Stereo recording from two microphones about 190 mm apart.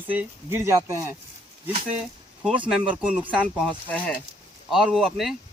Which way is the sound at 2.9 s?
10° right (ahead or behind).